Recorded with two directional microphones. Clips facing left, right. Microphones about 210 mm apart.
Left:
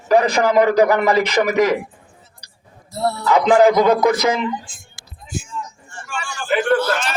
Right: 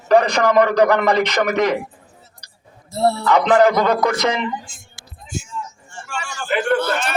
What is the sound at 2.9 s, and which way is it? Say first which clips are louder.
Speech: right 4 dB; 25° right (ahead or behind).